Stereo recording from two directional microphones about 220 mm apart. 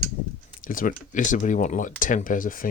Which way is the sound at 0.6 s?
40° left (ahead or behind).